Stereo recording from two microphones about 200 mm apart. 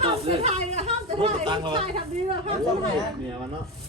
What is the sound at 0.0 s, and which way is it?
Chatter, 30° right (ahead or behind).